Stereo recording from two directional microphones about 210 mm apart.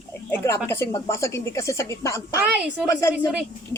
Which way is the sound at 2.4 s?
5° right (ahead or behind).